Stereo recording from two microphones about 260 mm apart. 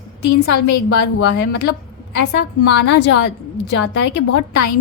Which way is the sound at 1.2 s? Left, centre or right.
Left.